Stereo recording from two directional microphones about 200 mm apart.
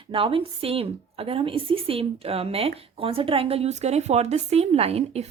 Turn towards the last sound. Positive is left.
turn(degrees=-30)  # may be behind; listen again after turning